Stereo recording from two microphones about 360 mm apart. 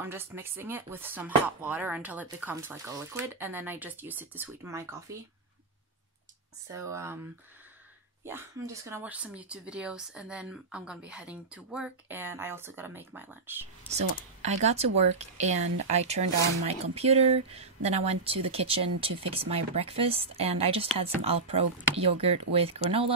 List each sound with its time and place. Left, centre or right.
0.0 s speech: centre
6.7 s speech: centre
8.3 s speech: centre
13.8 s speech: centre